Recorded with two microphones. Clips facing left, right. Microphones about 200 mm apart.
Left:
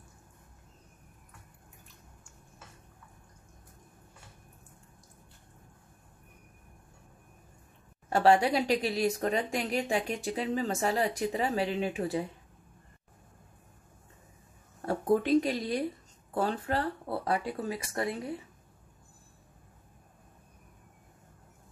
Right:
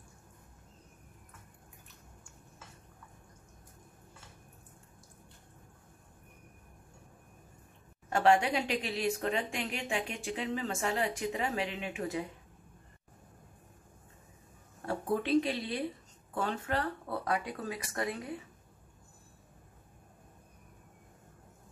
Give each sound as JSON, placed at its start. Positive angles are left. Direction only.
{"t": 8.1, "sound": "speech", "side_deg": 35}
{"t": 14.9, "sound": "speech", "side_deg": 40}